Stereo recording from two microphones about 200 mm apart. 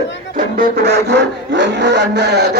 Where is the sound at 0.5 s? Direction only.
55° right (ahead or behind).